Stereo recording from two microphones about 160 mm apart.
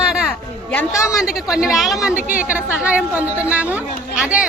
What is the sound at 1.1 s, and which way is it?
A woman's voice, 5° right (ahead or behind).